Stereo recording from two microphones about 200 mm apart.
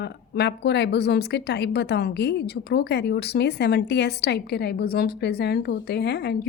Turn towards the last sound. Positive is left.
turn(degrees=55)  # may be behind; listen again after turning